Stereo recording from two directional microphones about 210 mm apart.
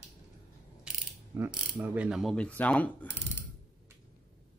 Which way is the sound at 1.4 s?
10° right (ahead or behind).